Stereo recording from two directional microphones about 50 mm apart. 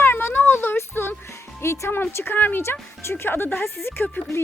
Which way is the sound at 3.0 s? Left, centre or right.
Left.